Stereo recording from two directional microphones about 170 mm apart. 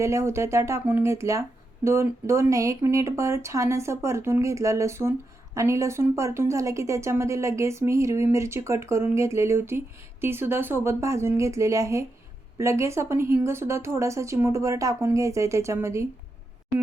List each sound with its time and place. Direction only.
0.0 s a woman's voice: 15° right (ahead or behind)